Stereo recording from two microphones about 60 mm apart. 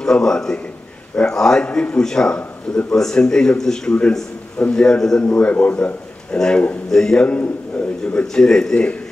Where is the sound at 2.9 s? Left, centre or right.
Centre.